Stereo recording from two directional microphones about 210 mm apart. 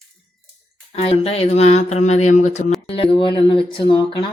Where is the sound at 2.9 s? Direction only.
25° left (ahead or behind).